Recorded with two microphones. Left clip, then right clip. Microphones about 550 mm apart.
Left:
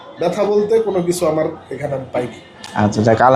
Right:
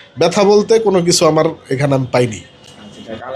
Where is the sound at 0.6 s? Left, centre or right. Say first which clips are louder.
Right 3 dB; right.